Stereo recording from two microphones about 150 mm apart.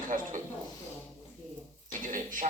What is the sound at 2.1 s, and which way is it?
Speech, 60° right (ahead or behind).